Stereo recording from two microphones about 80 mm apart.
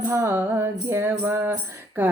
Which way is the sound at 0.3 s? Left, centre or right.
Right.